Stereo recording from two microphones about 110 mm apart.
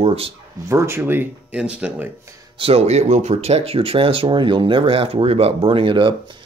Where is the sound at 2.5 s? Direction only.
55° right (ahead or behind).